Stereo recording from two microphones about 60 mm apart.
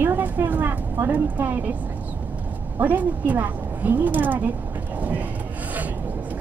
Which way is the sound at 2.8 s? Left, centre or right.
Right.